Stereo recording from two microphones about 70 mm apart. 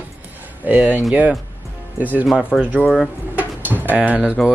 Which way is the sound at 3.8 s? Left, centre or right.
Right.